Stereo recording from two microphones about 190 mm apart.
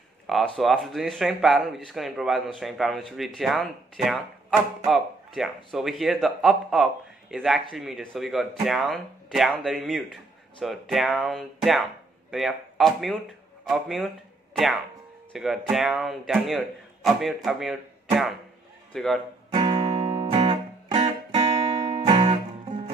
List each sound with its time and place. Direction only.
0.6 s speech: centre (ahead or behind)
15.3 s speech: centre (ahead or behind)
19.5 s music: 25° right (ahead or behind)